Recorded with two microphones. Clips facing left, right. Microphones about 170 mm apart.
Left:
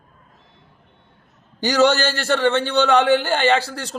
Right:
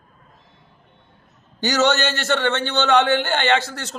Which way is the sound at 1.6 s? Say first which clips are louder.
Left 2 dB; 30° left (ahead or behind).